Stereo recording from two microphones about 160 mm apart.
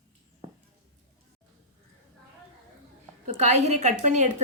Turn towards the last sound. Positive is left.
turn(degrees=-45)  # may be behind; listen again after turning